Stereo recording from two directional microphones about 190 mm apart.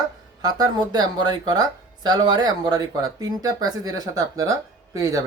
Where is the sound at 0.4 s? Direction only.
20° right (ahead or behind).